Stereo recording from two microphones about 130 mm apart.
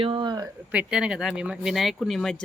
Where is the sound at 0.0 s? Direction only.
40° right (ahead or behind).